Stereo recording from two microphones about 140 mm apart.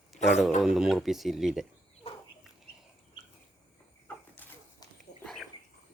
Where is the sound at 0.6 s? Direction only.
Centre (ahead or behind).